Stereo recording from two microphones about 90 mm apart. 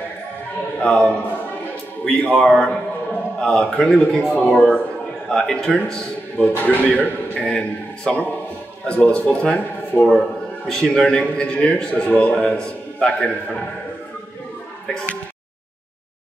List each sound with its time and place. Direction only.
0.7 s a man's voice: 10° left (ahead or behind)
2.0 s a man's voice: 10° left (ahead or behind)
6.5 s a man's voice: 20° left (ahead or behind)